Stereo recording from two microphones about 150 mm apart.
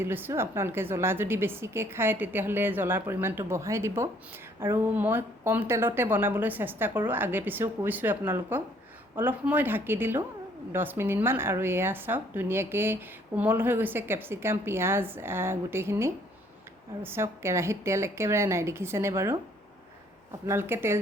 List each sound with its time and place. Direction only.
0.0 s speech: 15° right (ahead or behind)
20.5 s speech: 15° right (ahead or behind)